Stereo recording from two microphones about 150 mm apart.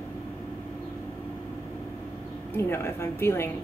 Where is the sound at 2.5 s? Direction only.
15° left (ahead or behind).